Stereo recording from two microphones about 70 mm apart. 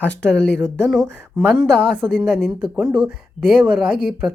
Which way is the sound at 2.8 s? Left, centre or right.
Centre.